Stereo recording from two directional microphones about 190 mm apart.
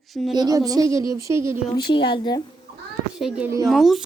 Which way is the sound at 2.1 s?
25° left (ahead or behind).